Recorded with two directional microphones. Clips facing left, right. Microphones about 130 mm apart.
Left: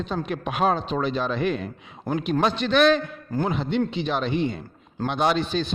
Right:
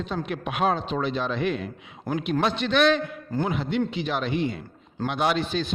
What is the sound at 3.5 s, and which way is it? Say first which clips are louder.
A man's voice: left 2 dB; 30° left (ahead or behind).